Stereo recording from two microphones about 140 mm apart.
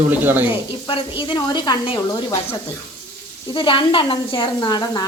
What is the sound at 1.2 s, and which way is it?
Speech, 35° left (ahead or behind).